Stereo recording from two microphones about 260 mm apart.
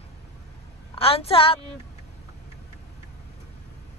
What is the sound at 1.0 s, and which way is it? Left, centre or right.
Speech, left.